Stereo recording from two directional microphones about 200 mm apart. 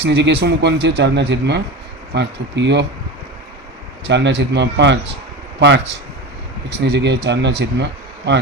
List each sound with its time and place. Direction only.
0.0 s speech: 60° right (ahead or behind)
4.0 s speech: 60° right (ahead or behind)